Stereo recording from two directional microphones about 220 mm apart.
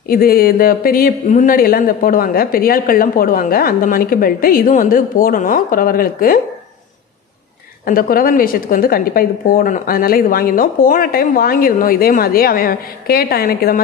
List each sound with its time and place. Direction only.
0.1 s speech: 40° left (ahead or behind)
7.8 s speech: 40° left (ahead or behind)